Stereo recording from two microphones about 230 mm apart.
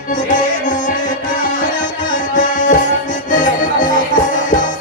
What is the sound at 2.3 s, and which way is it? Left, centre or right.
Music, left.